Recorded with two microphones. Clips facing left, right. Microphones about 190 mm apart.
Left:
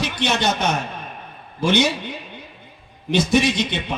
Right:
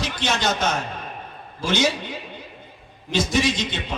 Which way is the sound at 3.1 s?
60° left (ahead or behind).